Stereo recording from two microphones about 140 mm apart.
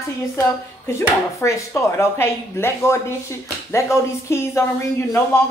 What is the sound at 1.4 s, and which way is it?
A man's voice, 20° left (ahead or behind).